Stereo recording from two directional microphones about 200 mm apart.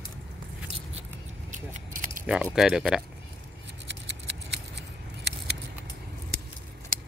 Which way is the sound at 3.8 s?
60° right (ahead or behind).